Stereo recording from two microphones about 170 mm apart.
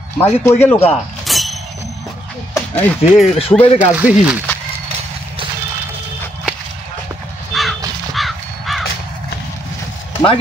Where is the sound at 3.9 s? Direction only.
10° right (ahead or behind).